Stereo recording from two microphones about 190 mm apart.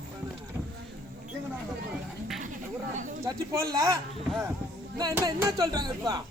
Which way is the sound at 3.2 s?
15° right (ahead or behind).